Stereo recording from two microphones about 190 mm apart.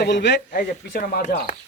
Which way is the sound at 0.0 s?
65° left (ahead or behind).